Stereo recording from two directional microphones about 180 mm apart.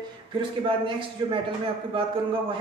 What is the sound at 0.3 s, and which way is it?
A woman's voice, 30° right (ahead or behind).